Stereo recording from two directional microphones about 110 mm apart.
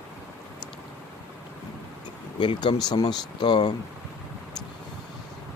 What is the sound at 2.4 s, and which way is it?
Speech, 45° left (ahead or behind).